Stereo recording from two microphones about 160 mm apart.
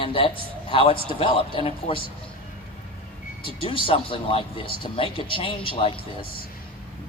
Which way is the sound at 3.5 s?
35° left (ahead or behind).